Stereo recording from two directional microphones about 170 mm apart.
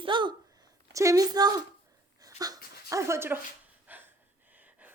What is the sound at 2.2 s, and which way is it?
Dog, 20° right (ahead or behind).